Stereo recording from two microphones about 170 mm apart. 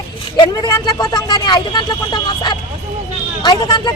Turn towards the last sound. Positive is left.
turn(degrees=25)  # may be behind; listen again after turning